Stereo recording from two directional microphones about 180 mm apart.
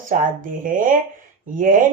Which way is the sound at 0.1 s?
50° right (ahead or behind).